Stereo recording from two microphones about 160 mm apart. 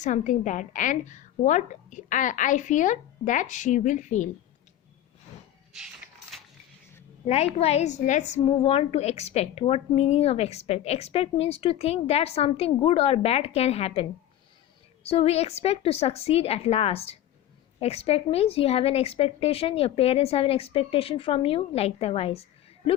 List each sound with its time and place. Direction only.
0.0 s a woman's voice: 50° left (ahead or behind)
7.3 s a woman's voice: 40° left (ahead or behind)